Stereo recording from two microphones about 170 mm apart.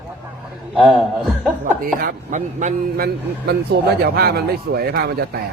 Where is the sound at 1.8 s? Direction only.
55° right (ahead or behind).